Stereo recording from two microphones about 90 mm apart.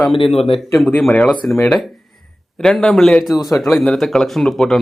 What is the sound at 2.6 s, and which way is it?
Speech, 5° left (ahead or behind).